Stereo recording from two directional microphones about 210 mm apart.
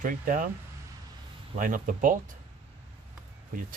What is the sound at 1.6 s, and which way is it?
Speech, 40° right (ahead or behind).